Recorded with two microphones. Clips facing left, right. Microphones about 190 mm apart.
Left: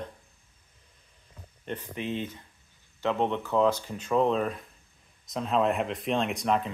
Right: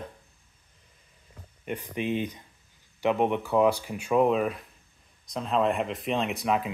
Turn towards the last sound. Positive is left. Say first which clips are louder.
# even
turn(degrees=-5)  # may be behind; listen again after turning